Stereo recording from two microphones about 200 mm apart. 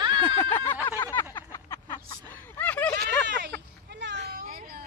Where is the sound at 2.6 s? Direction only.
10° left (ahead or behind).